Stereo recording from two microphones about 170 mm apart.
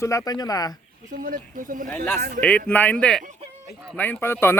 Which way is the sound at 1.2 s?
55° right (ahead or behind).